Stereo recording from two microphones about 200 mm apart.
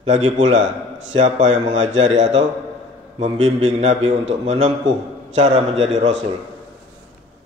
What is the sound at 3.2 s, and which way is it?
Speech, 30° right (ahead or behind).